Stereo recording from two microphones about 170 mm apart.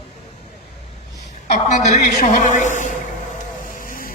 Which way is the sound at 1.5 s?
45° left (ahead or behind).